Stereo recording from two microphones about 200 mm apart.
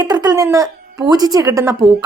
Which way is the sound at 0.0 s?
20° right (ahead or behind).